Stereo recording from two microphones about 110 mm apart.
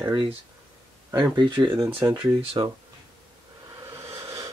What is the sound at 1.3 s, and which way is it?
Speech, 40° right (ahead or behind).